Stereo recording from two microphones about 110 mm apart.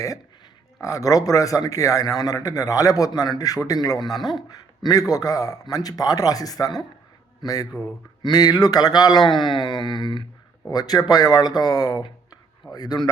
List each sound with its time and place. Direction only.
0.8 s a man's voice: 30° left (ahead or behind)